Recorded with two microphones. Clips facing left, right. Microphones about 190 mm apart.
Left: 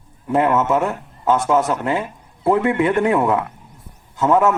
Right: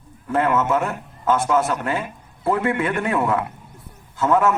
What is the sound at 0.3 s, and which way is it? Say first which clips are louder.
A man's voice: left 3 dB; 20° left (ahead or behind).